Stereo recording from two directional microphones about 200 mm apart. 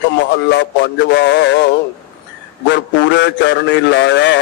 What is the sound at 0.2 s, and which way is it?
A man's voice, 60° left (ahead or behind).